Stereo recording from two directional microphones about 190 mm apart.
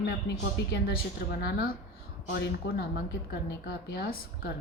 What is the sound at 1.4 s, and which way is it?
A woman's voice, 55° left (ahead or behind).